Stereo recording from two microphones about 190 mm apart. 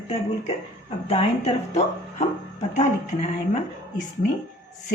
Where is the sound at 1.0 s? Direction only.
30° left (ahead or behind).